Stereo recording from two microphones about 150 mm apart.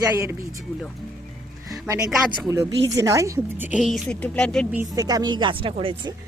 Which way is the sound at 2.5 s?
20° right (ahead or behind).